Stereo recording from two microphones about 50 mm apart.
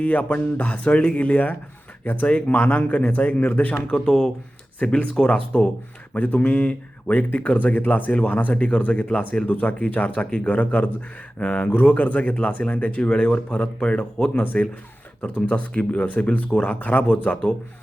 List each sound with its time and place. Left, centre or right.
0.0 s speech: left
4.0 s speech: centre
4.8 s speech: left